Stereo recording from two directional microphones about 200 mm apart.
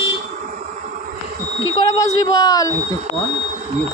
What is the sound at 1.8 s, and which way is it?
Speech, 15° left (ahead or behind).